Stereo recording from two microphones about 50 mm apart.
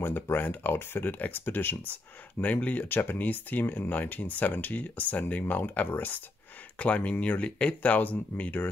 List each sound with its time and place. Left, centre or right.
0.0 s speech: left